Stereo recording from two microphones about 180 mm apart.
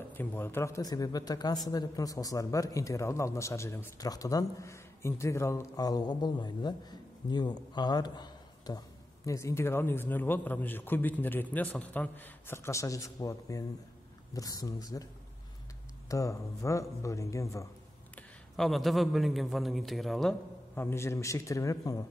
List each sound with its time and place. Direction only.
0.1 s a man's voice: 10° left (ahead or behind)
16.1 s a man's voice: 15° left (ahead or behind)
18.1 s a man's voice: centre (ahead or behind)
20.7 s a man's voice: 15° left (ahead or behind)